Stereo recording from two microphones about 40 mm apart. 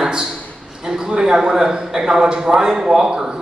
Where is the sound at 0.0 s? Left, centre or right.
Centre.